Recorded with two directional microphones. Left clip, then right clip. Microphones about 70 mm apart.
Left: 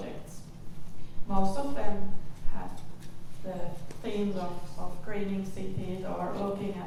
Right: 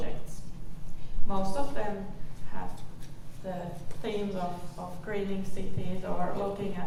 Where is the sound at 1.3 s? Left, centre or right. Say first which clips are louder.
Left 1 dB; right.